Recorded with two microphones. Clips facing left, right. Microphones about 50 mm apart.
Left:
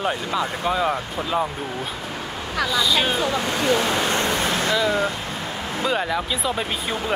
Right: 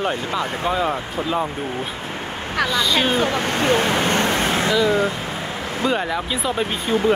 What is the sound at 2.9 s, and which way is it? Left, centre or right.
Speech, right.